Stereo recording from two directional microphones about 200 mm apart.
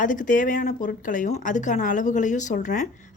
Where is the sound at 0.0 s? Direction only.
40° left (ahead or behind).